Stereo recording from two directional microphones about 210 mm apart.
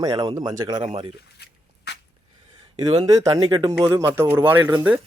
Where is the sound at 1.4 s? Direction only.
50° left (ahead or behind).